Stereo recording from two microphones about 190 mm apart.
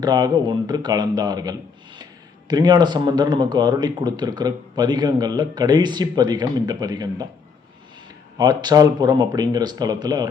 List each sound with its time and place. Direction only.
0.0 s speech: 20° right (ahead or behind)
8.4 s speech: 20° right (ahead or behind)